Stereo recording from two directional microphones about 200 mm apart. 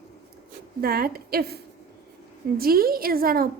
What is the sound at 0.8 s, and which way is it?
Speech, 50° right (ahead or behind).